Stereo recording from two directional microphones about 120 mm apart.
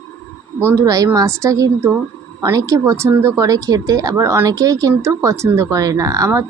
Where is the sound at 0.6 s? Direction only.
25° right (ahead or behind).